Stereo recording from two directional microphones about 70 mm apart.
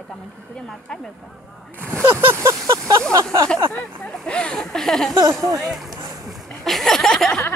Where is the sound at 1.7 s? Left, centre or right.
Right.